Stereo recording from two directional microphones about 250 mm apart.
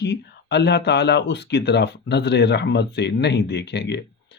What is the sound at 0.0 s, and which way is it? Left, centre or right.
Speech, left.